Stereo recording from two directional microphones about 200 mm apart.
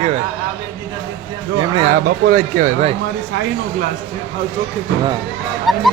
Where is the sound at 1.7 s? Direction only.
35° right (ahead or behind).